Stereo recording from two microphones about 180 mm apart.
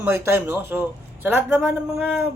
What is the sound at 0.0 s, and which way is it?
A man's voice, 15° right (ahead or behind).